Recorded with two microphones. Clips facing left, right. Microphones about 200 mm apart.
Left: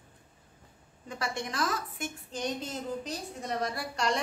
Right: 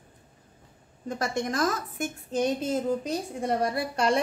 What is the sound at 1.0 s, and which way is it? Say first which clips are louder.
A woman's voice: right 6 dB; 45° right (ahead or behind).